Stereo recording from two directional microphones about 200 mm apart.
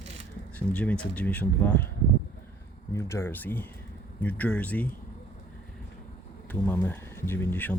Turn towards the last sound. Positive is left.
turn(degrees=10)  # may be behind; listen again after turning